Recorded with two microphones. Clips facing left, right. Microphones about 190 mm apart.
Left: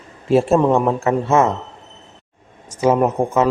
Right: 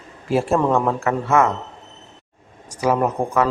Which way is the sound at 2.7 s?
25° left (ahead or behind).